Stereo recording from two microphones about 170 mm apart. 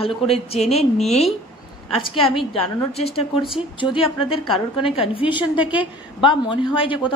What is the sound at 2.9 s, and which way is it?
A woman's voice, 35° left (ahead or behind).